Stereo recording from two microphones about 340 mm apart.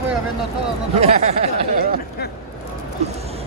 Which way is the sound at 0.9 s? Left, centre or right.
Centre.